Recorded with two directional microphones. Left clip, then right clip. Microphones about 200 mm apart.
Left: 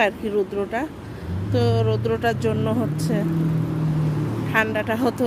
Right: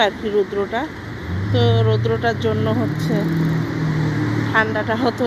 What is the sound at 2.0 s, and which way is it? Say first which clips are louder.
Speech: right 2 dB; 25° left (ahead or behind).